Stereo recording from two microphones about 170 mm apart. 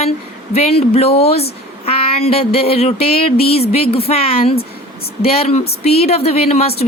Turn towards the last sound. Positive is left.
turn(degrees=35)  # may be behind; listen again after turning